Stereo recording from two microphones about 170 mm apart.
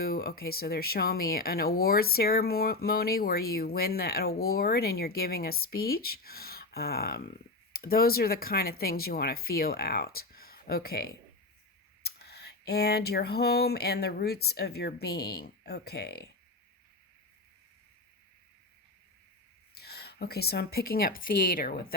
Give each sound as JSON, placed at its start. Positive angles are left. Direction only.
{"t": 0.0, "sound": "speech", "side_deg": 65}
{"t": 19.7, "sound": "a woman's voice", "side_deg": 70}